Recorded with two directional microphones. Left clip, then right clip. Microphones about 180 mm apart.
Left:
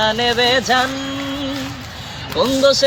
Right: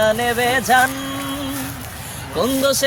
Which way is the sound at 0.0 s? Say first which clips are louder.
Left 1 dB; 15° right (ahead or behind).